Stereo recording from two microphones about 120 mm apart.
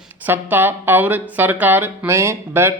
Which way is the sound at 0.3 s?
15° right (ahead or behind).